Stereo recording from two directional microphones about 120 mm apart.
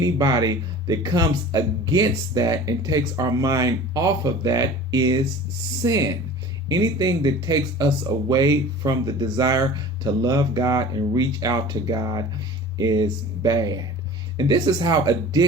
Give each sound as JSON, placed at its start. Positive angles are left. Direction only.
{"t": 0.0, "sound": "speech", "side_deg": -30}